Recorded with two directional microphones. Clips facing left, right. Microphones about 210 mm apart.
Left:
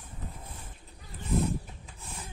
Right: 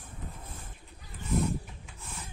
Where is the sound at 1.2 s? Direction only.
55° left (ahead or behind).